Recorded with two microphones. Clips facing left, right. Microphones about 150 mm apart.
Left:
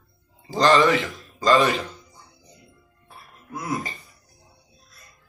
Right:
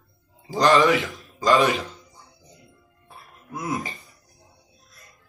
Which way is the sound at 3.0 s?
20° right (ahead or behind).